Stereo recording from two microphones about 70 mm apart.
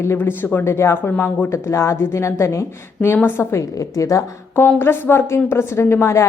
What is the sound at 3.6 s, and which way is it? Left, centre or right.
Speech, left.